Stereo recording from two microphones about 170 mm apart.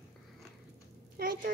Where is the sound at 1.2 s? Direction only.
55° right (ahead or behind).